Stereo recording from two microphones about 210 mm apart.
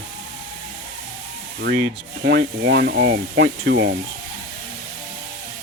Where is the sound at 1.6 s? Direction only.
55° right (ahead or behind).